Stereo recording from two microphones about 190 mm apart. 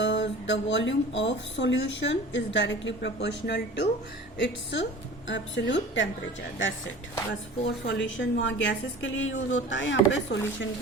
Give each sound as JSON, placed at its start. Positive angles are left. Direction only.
{"t": 0.0, "sound": "speech", "side_deg": 70}
{"t": 7.9, "sound": "speech", "side_deg": 70}